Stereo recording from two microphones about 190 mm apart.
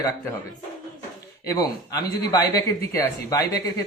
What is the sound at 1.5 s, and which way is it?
Speech, 20° left (ahead or behind).